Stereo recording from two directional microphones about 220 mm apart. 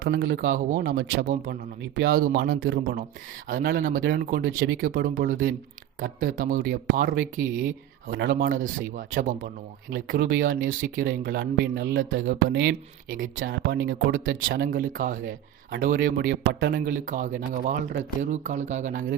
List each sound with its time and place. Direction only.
0.0 s speech: 50° right (ahead or behind)
3.5 s speech: 40° right (ahead or behind); by 12.3 s 60° right (ahead or behind)
12.3 s speech: 45° right (ahead or behind)